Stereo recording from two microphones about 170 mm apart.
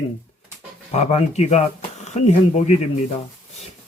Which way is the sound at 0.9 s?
40° left (ahead or behind).